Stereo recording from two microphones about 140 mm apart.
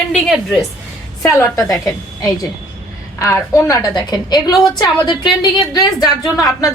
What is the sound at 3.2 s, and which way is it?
A woman's voice, 20° left (ahead or behind).